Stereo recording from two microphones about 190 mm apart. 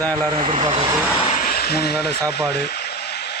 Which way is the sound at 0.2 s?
25° right (ahead or behind).